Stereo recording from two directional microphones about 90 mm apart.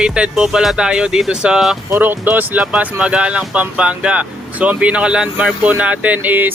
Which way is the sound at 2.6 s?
10° right (ahead or behind).